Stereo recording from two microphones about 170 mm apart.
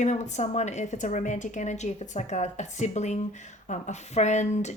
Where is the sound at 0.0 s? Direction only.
45° left (ahead or behind).